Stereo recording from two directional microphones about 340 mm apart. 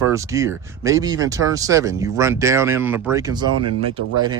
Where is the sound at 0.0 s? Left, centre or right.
Centre.